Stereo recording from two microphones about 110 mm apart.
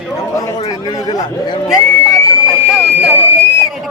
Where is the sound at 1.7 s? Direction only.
5° right (ahead or behind).